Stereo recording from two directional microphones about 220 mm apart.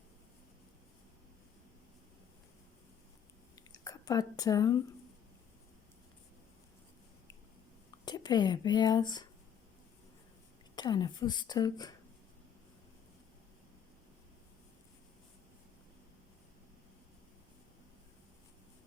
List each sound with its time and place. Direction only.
3.5 s a sound: 15° left (ahead or behind)
8.0 s speech: 20° left (ahead or behind)
10.8 s a woman's voice: 20° left (ahead or behind)